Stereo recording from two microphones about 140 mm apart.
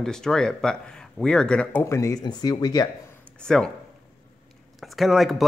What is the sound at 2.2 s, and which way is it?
Speech, 30° left (ahead or behind).